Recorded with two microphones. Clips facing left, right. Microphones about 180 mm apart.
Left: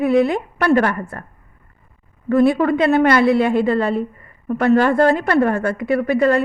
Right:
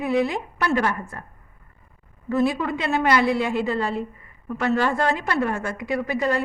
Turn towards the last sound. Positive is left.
turn(degrees=60)  # may be behind; listen again after turning